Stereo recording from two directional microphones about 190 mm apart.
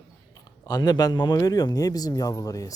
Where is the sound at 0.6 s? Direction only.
20° left (ahead or behind).